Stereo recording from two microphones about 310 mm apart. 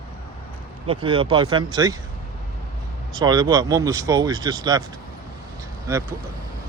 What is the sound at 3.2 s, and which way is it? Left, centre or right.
Speech, centre.